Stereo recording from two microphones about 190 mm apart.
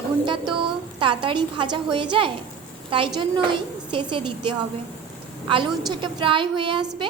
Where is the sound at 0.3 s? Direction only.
25° right (ahead or behind).